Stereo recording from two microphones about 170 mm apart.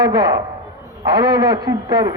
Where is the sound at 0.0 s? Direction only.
20° right (ahead or behind).